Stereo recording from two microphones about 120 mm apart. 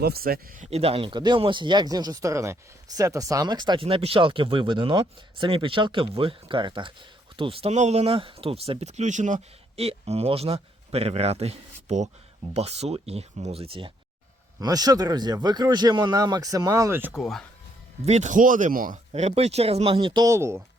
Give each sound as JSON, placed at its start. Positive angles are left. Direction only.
{"t": 0.5, "sound": "speech", "side_deg": -90}
{"t": 0.8, "sound": "speech", "side_deg": -50}
{"t": 7.7, "sound": "speech", "side_deg": -75}
{"t": 14.6, "sound": "speech", "side_deg": -30}
{"t": 17.1, "sound": "speech", "side_deg": 0}
{"t": 18.0, "sound": "speech", "side_deg": -75}
{"t": 19.1, "sound": "speech", "side_deg": -65}
{"t": 20.2, "sound": "speech", "side_deg": -20}